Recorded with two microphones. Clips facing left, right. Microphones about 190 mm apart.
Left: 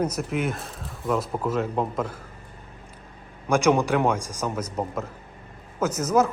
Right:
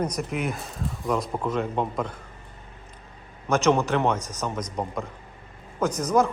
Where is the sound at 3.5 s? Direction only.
10° left (ahead or behind).